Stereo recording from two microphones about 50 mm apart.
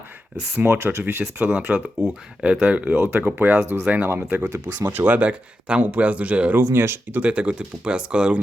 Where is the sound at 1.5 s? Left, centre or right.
Right.